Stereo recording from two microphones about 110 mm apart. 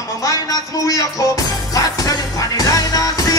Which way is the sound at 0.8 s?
35° left (ahead or behind).